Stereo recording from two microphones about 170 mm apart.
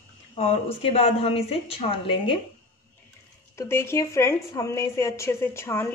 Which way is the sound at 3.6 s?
15° left (ahead or behind).